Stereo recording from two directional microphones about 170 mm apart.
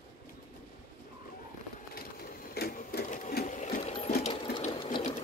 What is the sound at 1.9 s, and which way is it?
Sewing machine, 60° left (ahead or behind).